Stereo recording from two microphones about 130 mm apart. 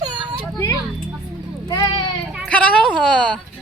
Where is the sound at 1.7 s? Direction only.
35° left (ahead or behind).